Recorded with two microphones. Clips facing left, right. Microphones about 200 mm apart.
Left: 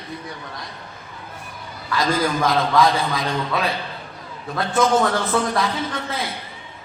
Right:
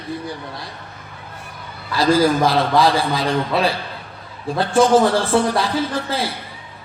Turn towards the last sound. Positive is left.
turn(degrees=-30)  # may be behind; listen again after turning